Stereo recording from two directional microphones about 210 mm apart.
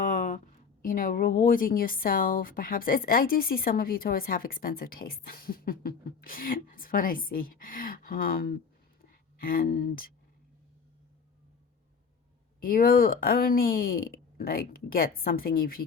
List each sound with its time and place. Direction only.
0.0 s a sound: 35° left (ahead or behind)
0.8 s a woman's voice: 40° left (ahead or behind)
12.6 s a woman's voice: 45° left (ahead or behind)